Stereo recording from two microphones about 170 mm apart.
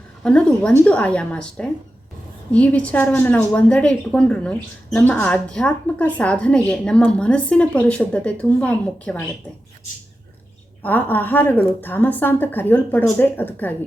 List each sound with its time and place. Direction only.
0.2 s a woman's voice: 5° left (ahead or behind)
10.8 s a woman's voice: 10° left (ahead or behind)